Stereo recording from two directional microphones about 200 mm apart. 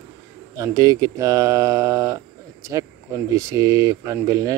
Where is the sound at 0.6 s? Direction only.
15° right (ahead or behind).